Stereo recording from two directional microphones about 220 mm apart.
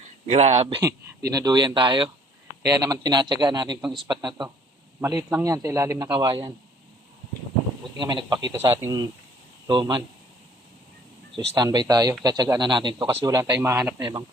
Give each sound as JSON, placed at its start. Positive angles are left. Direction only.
{"t": 0.3, "sound": "speech", "side_deg": -30}
{"t": 1.3, "sound": "speech", "side_deg": -20}
{"t": 4.9, "sound": "a man's voice", "side_deg": -10}
{"t": 7.9, "sound": "speech", "side_deg": -20}
{"t": 11.3, "sound": "a man's voice", "side_deg": -20}